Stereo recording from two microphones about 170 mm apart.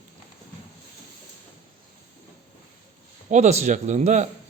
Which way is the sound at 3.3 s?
40° right (ahead or behind).